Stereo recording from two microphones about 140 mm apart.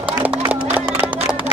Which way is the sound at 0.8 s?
10° right (ahead or behind).